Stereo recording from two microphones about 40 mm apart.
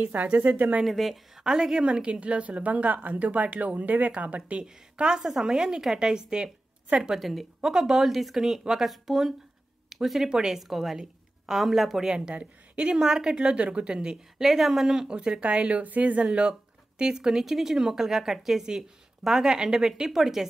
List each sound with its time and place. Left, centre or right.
0.0 s speech: right
0.8 s speech: centre
1.4 s a woman's voice: centre; by 4.4 s right
4.6 s a woman's voice: right
7.2 s a woman's voice: centre
12.0 s a woman's voice: right
12.9 s a woman's voice: centre
14.4 s a woman's voice: centre
15.0 s a woman's voice: right
16.3 s a woman's voice: right